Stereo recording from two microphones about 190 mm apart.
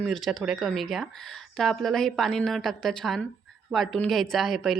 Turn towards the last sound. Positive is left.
turn(degrees=0)  # may be behind; listen again after turning